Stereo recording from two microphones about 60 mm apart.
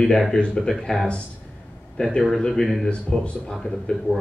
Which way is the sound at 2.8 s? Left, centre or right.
Centre.